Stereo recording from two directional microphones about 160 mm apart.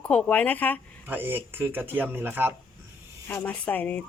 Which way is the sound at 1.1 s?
10° right (ahead or behind).